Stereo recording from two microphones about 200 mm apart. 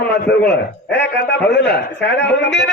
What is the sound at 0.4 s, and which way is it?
Speech, 60° left (ahead or behind).